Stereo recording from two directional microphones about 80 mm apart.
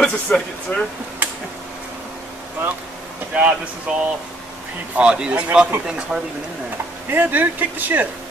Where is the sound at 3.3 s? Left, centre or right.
Centre.